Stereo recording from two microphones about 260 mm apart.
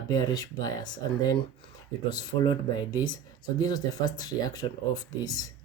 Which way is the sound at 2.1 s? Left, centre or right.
Centre.